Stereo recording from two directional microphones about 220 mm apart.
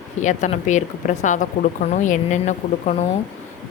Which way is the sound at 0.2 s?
35° left (ahead or behind).